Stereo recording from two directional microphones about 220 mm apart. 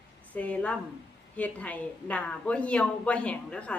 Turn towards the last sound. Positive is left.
turn(degrees=5)  # may be behind; listen again after turning